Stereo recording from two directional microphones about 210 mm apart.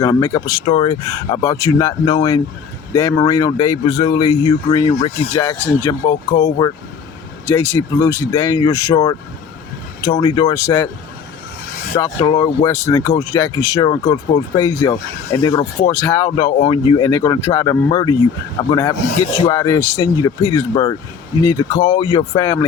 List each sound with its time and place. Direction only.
0.0 s speech: 15° left (ahead or behind)
10.0 s speech: 20° left (ahead or behind)
11.9 s speech: 20° left (ahead or behind)
17.1 s speech: 15° left (ahead or behind)